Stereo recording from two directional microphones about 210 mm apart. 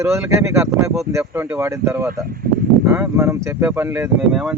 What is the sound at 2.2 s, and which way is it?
Speech, 45° right (ahead or behind).